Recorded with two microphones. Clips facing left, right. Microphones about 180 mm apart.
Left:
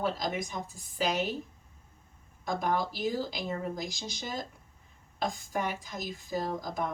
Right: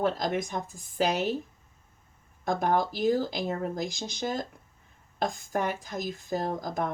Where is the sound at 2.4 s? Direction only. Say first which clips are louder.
Right 4 dB; 50° right (ahead or behind).